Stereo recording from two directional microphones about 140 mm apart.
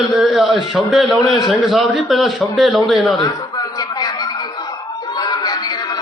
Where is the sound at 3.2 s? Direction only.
30° left (ahead or behind).